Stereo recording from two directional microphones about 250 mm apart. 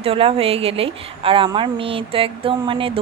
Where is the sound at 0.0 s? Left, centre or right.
Right.